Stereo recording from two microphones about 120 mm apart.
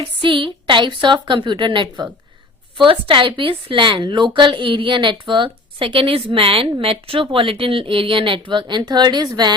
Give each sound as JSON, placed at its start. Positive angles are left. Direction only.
{"t": 0.0, "sound": "a woman's voice", "side_deg": -45}